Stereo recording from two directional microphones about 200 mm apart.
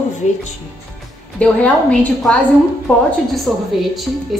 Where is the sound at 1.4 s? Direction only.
5° left (ahead or behind).